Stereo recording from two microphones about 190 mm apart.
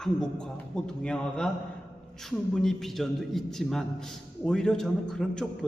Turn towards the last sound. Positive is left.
turn(degrees=5)  # may be behind; listen again after turning